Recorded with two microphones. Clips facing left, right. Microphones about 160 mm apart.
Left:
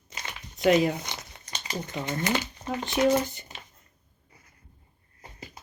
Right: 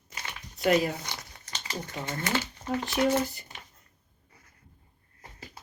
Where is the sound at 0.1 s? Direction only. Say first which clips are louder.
Left 1 dB; 20° left (ahead or behind).